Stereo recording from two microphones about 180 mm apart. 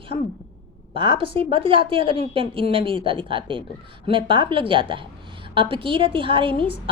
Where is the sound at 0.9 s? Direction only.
30° right (ahead or behind).